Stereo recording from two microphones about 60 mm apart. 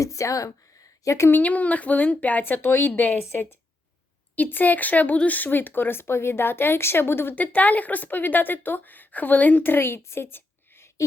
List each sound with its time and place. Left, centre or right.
0.0 s a woman's voice: left
1.3 s speech: left
7.3 s speech: left